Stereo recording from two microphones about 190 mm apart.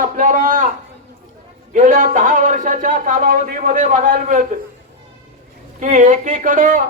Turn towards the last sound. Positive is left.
turn(degrees=-45)  # may be behind; listen again after turning